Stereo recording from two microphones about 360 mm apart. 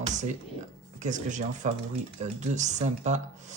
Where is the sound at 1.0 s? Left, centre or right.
Right.